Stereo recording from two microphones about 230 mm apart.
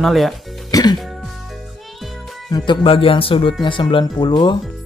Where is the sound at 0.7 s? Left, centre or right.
Centre.